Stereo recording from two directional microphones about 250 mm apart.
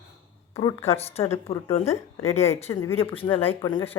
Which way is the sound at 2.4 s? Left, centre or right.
Centre.